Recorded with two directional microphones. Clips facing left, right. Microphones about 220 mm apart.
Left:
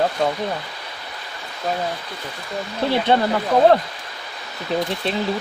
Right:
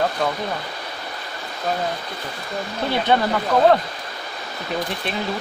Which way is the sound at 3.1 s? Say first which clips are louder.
Right 1 dB; 30° left (ahead or behind).